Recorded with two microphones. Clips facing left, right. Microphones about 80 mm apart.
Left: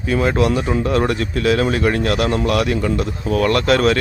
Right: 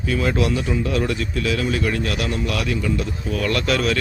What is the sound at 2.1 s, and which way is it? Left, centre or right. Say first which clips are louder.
Speech: left 7 dB; left.